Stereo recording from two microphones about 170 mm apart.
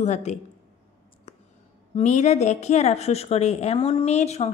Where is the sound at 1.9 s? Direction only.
45° left (ahead or behind).